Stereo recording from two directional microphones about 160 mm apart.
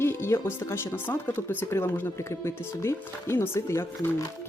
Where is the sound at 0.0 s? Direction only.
15° left (ahead or behind).